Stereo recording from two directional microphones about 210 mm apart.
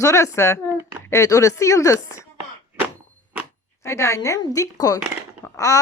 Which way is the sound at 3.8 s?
15° left (ahead or behind).